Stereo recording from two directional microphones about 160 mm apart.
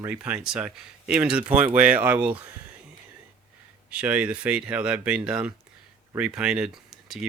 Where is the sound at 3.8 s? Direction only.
10° right (ahead or behind).